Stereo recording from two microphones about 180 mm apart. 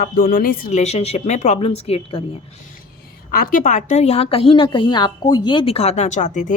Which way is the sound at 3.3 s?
50° left (ahead or behind).